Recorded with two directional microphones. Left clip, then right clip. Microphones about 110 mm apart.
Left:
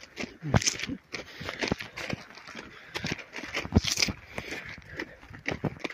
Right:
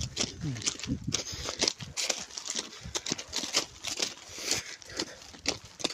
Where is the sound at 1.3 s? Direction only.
35° right (ahead or behind).